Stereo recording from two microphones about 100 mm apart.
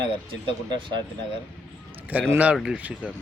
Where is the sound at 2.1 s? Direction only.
15° right (ahead or behind).